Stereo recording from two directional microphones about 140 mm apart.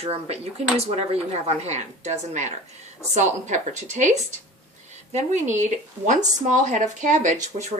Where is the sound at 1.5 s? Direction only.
50° right (ahead or behind).